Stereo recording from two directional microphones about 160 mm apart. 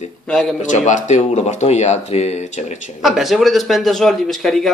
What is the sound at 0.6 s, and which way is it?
Speech, 50° left (ahead or behind).